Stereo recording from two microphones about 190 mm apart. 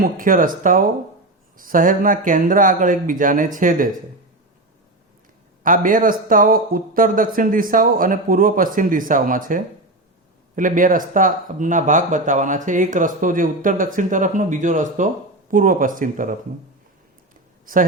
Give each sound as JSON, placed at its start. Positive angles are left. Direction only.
{"t": 0.0, "sound": "speech", "side_deg": -45}
{"t": 5.6, "sound": "speech", "side_deg": -45}